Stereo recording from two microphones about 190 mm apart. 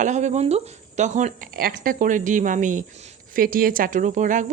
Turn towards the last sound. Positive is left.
turn(degrees=-40)  # may be behind; listen again after turning